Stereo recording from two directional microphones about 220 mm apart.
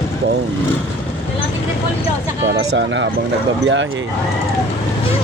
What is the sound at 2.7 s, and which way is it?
Speech, 55° right (ahead or behind).